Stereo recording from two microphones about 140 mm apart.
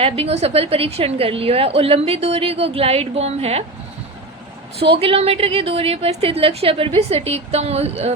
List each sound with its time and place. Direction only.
0.0 s a woman's voice: 50° right (ahead or behind)
4.8 s a woman's voice: 40° right (ahead or behind)